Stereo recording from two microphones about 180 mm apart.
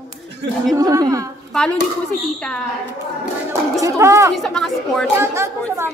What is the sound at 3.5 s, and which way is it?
Speech, 15° right (ahead or behind).